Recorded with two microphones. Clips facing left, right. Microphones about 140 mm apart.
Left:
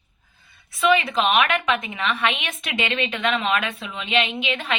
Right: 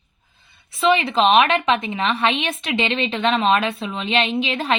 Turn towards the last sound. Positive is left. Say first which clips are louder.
# right 5 dB
turn(degrees=-35)  # may be behind; listen again after turning